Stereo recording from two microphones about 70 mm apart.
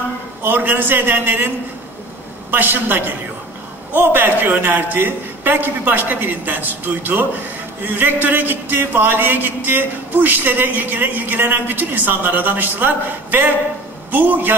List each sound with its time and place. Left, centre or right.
0.5 s a man's voice: right
2.5 s a man's voice: right